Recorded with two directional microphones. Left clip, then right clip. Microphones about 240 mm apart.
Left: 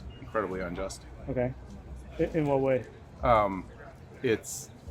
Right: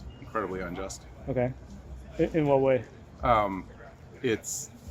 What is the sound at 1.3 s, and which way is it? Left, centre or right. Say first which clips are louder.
Speech: right 2 dB; right.